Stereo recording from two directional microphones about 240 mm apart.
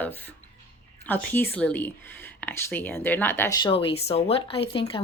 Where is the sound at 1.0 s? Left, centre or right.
Centre.